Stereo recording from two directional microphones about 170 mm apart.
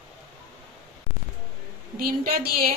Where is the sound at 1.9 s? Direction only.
60° right (ahead or behind).